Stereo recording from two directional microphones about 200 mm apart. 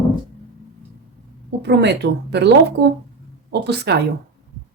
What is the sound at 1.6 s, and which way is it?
Speech, 55° right (ahead or behind).